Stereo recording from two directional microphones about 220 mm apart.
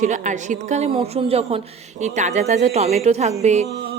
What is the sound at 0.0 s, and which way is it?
A woman's voice, 35° right (ahead or behind).